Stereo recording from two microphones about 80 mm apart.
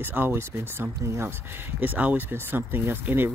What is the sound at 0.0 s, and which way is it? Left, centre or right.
Speech, right.